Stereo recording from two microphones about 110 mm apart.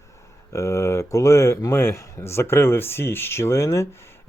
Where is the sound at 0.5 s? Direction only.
25° left (ahead or behind).